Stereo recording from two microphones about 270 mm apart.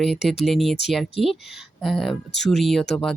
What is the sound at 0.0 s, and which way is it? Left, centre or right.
Speech, centre.